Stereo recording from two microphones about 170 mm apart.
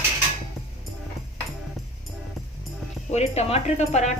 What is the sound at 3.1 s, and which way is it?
Speech, 40° left (ahead or behind).